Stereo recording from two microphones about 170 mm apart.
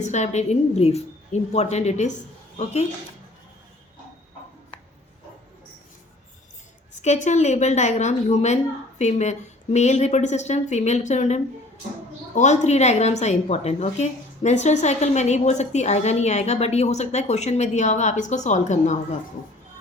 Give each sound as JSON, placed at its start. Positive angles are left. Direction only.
{"t": 0.0, "sound": "a woman's voice", "side_deg": 45}
{"t": 7.0, "sound": "a woman's voice", "side_deg": 45}